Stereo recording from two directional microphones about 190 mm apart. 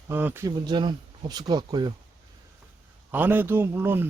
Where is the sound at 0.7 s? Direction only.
25° right (ahead or behind).